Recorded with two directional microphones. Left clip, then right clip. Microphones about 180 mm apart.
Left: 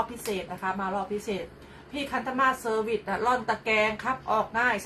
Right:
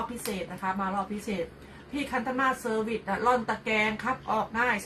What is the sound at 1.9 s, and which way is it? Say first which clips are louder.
A woman's voice: left 1 dB; 15° left (ahead or behind).